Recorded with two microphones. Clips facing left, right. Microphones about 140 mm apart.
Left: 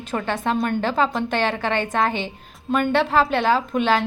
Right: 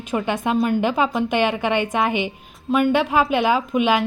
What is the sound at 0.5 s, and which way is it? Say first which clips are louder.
Speech: right 5 dB; centre (ahead or behind).